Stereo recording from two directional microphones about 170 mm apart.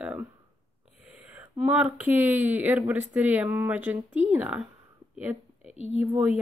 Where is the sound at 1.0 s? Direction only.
5° right (ahead or behind).